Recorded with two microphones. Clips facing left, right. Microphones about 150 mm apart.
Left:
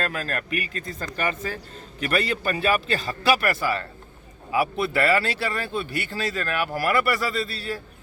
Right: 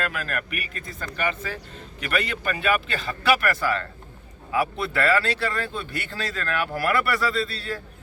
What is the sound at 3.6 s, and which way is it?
Speech, 10° left (ahead or behind).